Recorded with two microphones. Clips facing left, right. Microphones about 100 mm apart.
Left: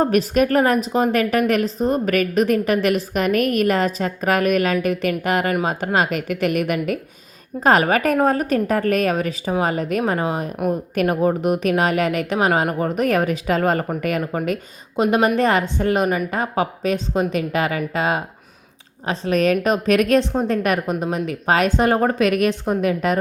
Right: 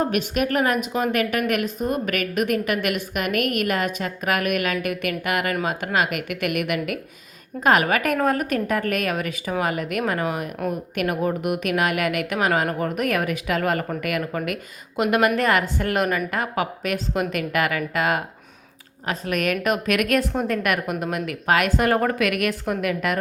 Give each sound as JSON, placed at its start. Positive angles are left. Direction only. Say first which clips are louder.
{"t": 0.0, "sound": "a woman's voice", "louder": "left 5 dB", "side_deg": 35}